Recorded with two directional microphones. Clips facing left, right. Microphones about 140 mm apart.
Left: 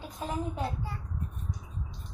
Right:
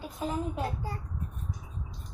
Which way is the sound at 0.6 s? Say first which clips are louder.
Right 1 dB; 40° right (ahead or behind).